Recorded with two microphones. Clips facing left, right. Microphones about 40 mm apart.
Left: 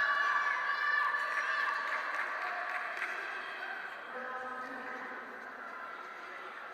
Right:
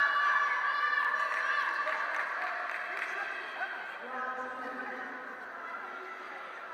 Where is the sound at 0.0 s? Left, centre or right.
Centre.